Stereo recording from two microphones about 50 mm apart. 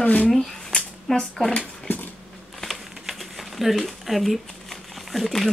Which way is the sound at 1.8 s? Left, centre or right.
Left.